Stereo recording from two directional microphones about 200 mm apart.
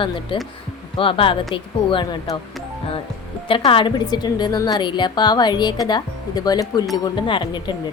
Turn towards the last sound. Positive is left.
turn(degrees=25)  # may be behind; listen again after turning